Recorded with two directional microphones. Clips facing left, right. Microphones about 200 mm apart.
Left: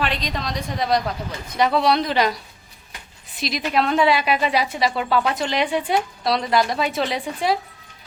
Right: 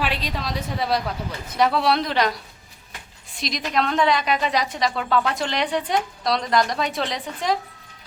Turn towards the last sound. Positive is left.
turn(degrees=10)  # may be behind; listen again after turning